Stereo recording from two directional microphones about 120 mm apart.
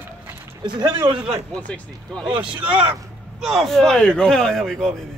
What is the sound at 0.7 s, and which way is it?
Speech, 35° right (ahead or behind).